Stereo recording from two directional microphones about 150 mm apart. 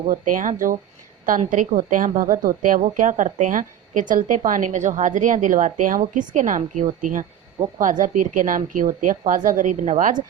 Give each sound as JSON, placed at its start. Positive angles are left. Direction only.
{"t": 0.1, "sound": "a woman's voice", "side_deg": -60}